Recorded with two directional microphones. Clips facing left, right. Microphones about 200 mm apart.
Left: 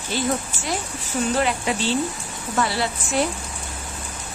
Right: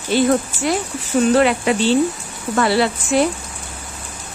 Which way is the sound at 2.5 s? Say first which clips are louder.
Right 7 dB; 65° right (ahead or behind).